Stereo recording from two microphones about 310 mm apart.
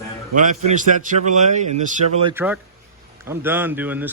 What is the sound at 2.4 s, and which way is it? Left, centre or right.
A man's voice, centre.